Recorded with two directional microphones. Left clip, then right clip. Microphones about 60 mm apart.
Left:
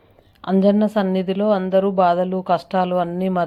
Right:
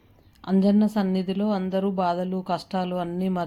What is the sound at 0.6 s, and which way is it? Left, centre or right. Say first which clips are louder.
A woman's voice: left 7 dB; centre.